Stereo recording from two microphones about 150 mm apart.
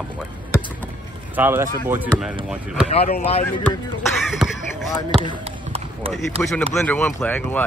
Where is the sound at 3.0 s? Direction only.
45° left (ahead or behind).